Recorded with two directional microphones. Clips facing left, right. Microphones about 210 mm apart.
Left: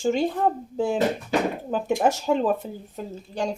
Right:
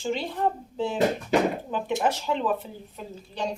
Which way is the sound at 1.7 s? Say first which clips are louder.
Left 4 dB; 45° left (ahead or behind).